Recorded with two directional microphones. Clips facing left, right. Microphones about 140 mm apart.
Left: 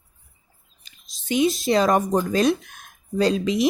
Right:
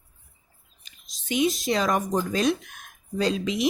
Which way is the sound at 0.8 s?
35° left (ahead or behind).